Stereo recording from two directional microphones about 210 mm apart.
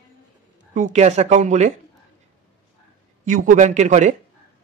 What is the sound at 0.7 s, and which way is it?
Speech, 35° right (ahead or behind).